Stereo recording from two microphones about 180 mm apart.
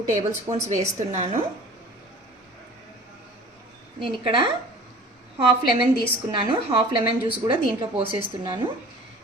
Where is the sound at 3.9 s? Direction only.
30° right (ahead or behind).